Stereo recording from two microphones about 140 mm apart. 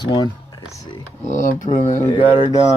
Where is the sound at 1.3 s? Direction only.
65° left (ahead or behind).